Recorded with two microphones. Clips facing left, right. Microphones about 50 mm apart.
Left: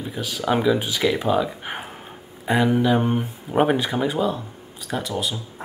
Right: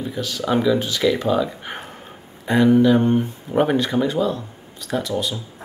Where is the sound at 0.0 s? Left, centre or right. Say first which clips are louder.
Right 1 dB; centre.